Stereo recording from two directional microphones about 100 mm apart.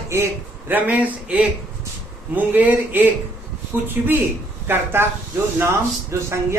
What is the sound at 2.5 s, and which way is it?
A man's voice, 15° right (ahead or behind).